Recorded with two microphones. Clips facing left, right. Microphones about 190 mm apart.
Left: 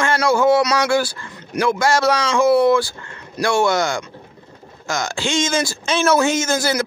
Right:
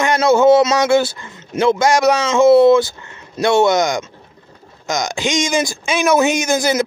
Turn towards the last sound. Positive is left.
turn(degrees=-20)  # may be behind; listen again after turning